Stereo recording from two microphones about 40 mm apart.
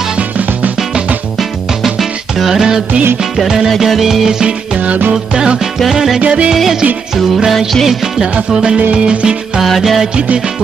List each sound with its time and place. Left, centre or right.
1.8 s music: centre
5.9 s music: centre
6.2 s music: right
6.5 s music: centre
7.5 s music: centre
9.6 s music: centre